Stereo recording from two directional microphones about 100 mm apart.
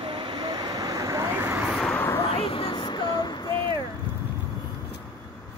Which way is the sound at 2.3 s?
70° left (ahead or behind).